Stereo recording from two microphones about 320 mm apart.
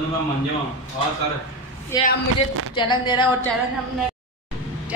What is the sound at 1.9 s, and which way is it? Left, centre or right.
A woman's voice, centre.